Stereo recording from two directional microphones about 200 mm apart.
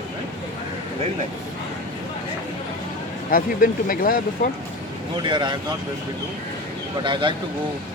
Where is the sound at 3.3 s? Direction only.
45° left (ahead or behind).